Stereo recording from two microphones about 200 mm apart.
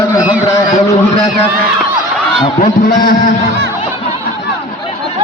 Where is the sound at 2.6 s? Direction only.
50° left (ahead or behind).